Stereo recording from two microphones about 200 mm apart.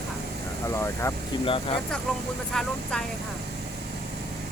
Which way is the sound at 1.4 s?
25° left (ahead or behind).